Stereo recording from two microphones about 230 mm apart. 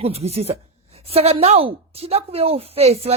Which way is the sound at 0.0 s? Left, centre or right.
Right.